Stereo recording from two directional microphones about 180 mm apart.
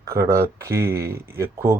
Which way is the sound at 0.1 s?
15° right (ahead or behind).